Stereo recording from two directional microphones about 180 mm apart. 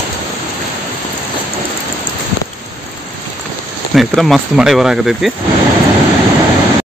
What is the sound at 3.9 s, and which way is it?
Speech, centre (ahead or behind).